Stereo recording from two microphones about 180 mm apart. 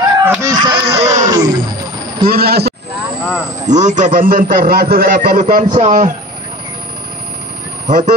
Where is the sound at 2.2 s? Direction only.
60° right (ahead or behind).